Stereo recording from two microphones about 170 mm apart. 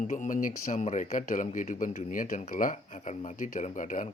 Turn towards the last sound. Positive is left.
turn(degrees=50)  # may be behind; listen again after turning